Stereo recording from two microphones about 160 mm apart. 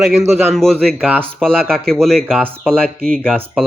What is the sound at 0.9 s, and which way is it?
Speech, 10° right (ahead or behind).